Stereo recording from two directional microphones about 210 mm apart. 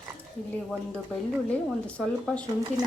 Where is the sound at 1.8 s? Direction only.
5° left (ahead or behind).